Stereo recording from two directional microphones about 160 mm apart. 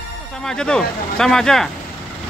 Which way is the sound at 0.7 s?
5° left (ahead or behind).